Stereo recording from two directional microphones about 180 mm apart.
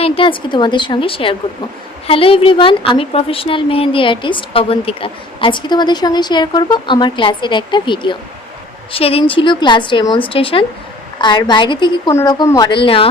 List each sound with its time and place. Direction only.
0.0 s a woman's voice: 30° left (ahead or behind)